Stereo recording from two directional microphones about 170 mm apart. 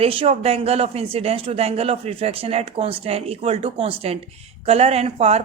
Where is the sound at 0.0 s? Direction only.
35° right (ahead or behind).